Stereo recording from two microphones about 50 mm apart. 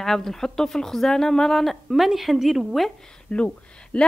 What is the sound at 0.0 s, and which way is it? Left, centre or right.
Speech, centre.